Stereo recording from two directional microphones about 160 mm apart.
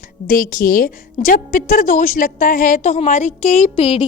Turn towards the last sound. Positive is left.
turn(degrees=35)  # may be behind; listen again after turning